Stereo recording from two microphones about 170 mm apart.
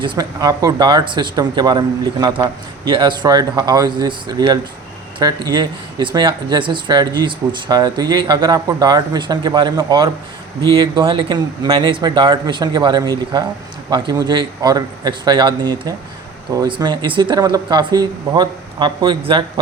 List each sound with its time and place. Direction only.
0.0 s speech: 25° right (ahead or behind)